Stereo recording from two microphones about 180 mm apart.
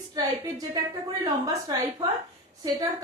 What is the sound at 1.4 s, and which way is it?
Speech, 20° right (ahead or behind).